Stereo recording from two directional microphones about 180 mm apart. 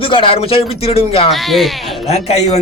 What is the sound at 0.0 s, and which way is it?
A man's voice, 30° left (ahead or behind).